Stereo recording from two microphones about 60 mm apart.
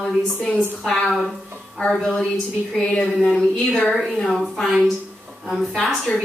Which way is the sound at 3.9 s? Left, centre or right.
Centre.